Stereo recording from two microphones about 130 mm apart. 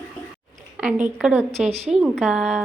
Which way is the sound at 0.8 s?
10° right (ahead or behind).